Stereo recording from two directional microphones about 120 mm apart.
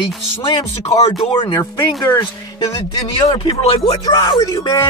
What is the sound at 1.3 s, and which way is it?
Speech, 40° left (ahead or behind).